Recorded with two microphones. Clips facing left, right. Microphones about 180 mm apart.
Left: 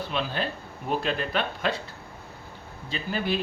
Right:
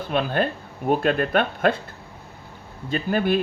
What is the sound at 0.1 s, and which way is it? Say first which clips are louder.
Speech: right 10 dB; 50° right (ahead or behind).